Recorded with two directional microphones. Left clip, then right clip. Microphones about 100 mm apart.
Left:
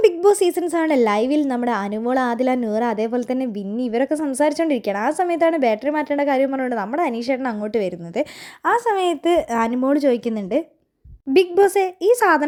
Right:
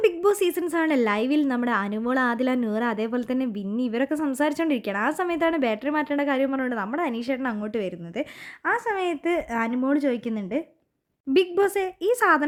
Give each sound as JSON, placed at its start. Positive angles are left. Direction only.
{"t": 0.0, "sound": "a woman's voice", "side_deg": 20}
{"t": 8.1, "sound": "a woman's voice", "side_deg": 40}
{"t": 11.3, "sound": "a woman's voice", "side_deg": 20}